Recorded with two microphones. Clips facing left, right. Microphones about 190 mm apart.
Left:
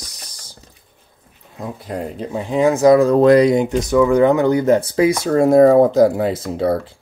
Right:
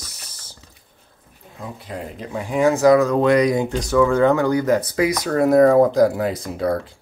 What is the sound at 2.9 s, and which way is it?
Speech, 35° left (ahead or behind).